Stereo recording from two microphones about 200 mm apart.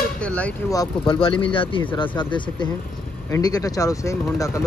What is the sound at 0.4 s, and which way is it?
Speech, 15° left (ahead or behind).